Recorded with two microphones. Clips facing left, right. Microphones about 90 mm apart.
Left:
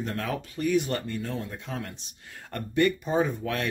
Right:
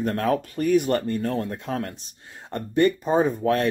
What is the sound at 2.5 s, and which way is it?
Speech, 35° right (ahead or behind).